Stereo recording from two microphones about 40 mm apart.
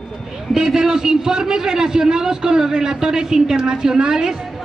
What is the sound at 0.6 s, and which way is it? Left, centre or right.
Speech, centre.